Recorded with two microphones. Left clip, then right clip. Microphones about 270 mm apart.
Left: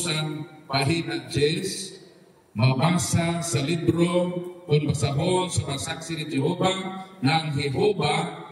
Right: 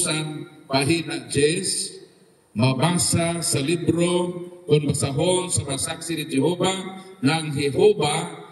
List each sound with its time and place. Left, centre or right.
0.7 s mantra: centre